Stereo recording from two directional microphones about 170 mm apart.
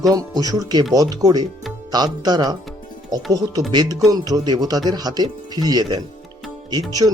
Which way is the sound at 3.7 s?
25° right (ahead or behind).